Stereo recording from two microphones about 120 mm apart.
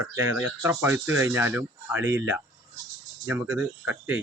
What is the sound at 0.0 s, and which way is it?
Speech, 25° right (ahead or behind).